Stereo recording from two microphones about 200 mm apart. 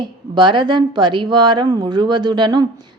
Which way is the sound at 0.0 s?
25° right (ahead or behind).